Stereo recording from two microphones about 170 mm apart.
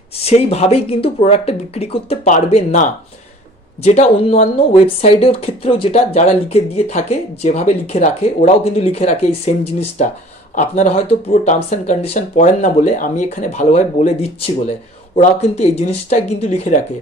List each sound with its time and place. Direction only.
0.2 s speech: 35° left (ahead or behind)